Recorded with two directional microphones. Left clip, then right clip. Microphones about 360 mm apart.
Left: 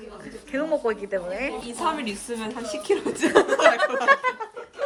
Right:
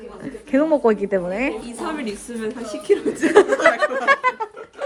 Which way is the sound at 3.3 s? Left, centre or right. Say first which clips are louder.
Right 3 dB; centre.